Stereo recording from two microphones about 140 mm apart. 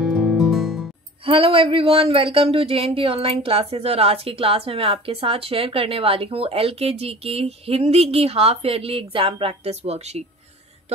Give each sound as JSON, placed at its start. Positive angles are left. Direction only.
{"t": 0.0, "sound": "music", "side_deg": -5}
{"t": 1.2, "sound": "speech", "side_deg": -40}